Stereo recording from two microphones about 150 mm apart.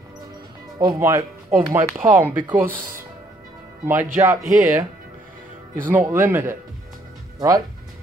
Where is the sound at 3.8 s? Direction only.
15° right (ahead or behind).